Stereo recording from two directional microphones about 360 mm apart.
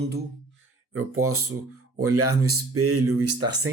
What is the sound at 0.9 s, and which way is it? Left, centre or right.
Speech, right.